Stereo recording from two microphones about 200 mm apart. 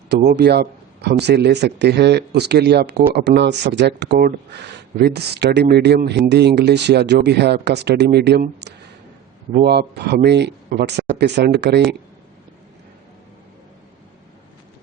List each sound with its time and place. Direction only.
0.3 s speech: 55° right (ahead or behind)